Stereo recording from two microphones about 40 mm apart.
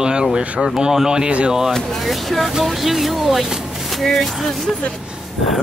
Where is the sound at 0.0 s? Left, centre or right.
Centre.